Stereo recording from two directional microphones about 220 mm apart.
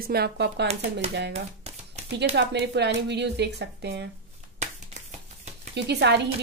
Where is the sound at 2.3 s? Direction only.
50° right (ahead or behind).